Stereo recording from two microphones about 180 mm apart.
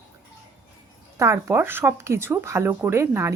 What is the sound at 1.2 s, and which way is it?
Speech, 15° right (ahead or behind).